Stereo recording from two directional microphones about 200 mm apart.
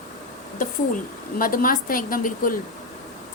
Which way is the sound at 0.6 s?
45° left (ahead or behind).